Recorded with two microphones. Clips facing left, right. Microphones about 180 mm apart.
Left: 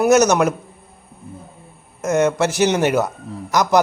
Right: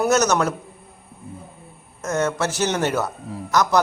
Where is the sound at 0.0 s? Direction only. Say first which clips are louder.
Left 5 dB; 15° left (ahead or behind).